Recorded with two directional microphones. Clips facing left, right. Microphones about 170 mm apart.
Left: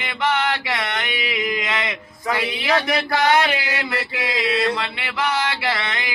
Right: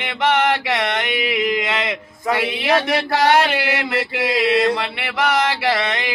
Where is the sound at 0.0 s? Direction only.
65° right (ahead or behind).